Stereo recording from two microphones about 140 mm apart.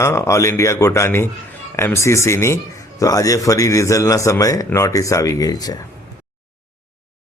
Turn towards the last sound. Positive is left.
turn(degrees=25)  # may be behind; listen again after turning